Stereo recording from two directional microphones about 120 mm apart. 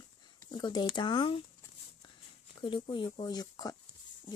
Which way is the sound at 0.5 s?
35° left (ahead or behind).